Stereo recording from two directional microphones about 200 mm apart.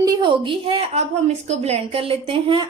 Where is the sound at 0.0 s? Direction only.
20° right (ahead or behind).